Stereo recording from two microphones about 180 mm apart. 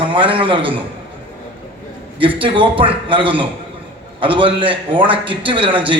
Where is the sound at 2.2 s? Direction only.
30° right (ahead or behind).